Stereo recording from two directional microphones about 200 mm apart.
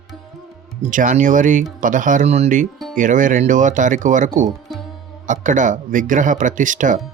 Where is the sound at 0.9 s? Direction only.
40° right (ahead or behind).